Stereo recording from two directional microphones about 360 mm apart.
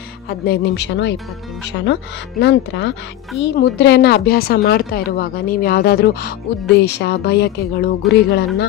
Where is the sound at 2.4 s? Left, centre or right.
Left.